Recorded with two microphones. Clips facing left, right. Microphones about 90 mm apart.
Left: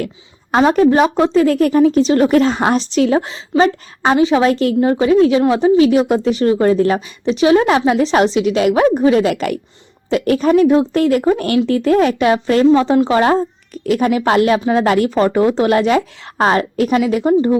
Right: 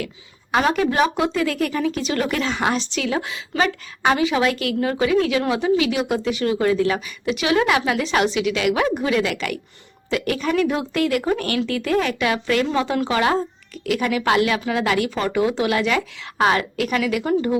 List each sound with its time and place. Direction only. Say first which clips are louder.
0.7 s speech: left 9 dB; 35° left (ahead or behind)